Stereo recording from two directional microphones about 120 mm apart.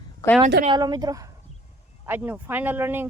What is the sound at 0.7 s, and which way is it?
Speech, 35° right (ahead or behind).